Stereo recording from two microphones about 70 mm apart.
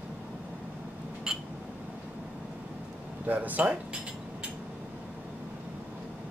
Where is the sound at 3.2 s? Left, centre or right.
Right.